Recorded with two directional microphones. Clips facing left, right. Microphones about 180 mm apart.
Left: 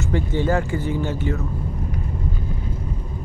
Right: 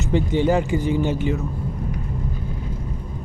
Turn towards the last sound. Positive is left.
turn(degrees=-15)  # may be behind; listen again after turning